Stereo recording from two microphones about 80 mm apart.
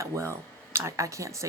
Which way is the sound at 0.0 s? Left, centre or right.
Right.